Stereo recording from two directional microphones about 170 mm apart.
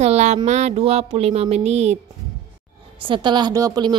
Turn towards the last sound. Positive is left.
turn(degrees=-20)  # may be behind; listen again after turning